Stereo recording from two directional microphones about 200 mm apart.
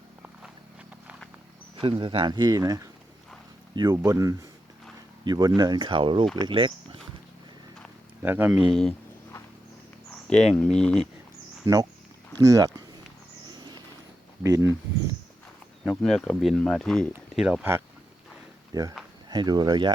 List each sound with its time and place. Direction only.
1.8 s speech: 25° right (ahead or behind)
8.2 s speech: 10° right (ahead or behind)
10.5 s speech: 5° left (ahead or behind)
11.6 s speech: 20° right (ahead or behind)
13.6 s a sound: 20° right (ahead or behind)
14.4 s speech: 15° right (ahead or behind)
15.8 s speech: centre (ahead or behind); by 19.9 s 20° right (ahead or behind)